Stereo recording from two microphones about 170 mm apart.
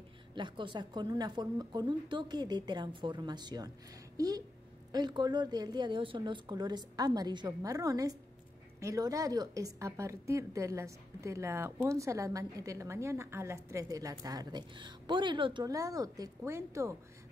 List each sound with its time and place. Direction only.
0.3 s a woman's voice: 25° right (ahead or behind)
4.9 s a woman's voice: 25° right (ahead or behind)